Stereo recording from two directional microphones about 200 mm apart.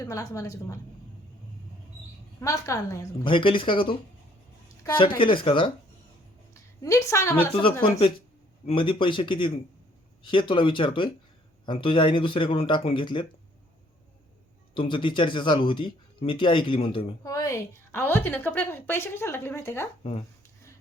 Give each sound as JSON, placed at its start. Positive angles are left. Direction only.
{"t": 0.0, "sound": "a woman's voice", "side_deg": 15}
{"t": 2.4, "sound": "speech", "side_deg": 15}
{"t": 4.9, "sound": "speech", "side_deg": 25}
{"t": 6.5, "sound": "a woman's voice", "side_deg": 15}
{"t": 7.5, "sound": "speech", "side_deg": 25}
{"t": 14.8, "sound": "speech", "side_deg": 25}
{"t": 17.3, "sound": "a woman's voice", "side_deg": 15}